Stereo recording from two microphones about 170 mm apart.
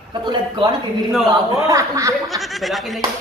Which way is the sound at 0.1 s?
25° right (ahead or behind).